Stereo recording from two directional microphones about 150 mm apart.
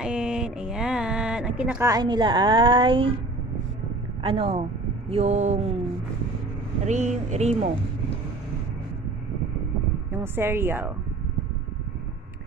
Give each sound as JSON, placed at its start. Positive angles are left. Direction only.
{"t": 0.0, "sound": "a sound", "side_deg": -5}
{"t": 1.8, "sound": "a woman's voice", "side_deg": -25}
{"t": 4.2, "sound": "a woman's voice", "side_deg": -40}
{"t": 6.9, "sound": "speech", "side_deg": -50}
{"t": 10.1, "sound": "speech", "side_deg": -15}